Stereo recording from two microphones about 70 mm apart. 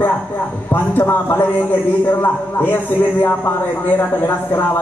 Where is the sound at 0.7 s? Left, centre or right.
Left.